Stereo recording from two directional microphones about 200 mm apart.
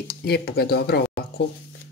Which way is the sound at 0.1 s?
50° left (ahead or behind).